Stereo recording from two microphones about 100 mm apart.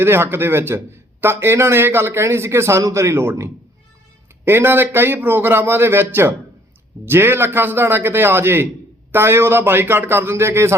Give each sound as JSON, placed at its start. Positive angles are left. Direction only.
{"t": 0.0, "sound": "a man's voice", "side_deg": -25}